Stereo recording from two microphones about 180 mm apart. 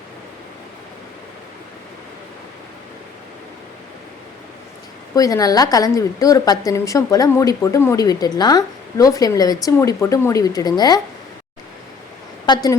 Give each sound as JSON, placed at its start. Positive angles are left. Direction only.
{"t": 5.1, "sound": "speech", "side_deg": 20}
{"t": 12.5, "sound": "speech", "side_deg": 25}